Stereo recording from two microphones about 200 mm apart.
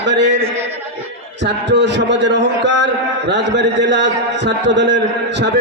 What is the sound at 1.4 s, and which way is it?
A man's voice, 60° right (ahead or behind).